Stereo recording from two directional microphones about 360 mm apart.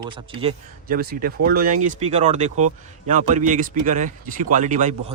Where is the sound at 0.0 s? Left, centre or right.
Centre.